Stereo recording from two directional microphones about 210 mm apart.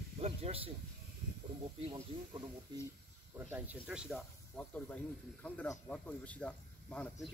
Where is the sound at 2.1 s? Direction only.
25° right (ahead or behind).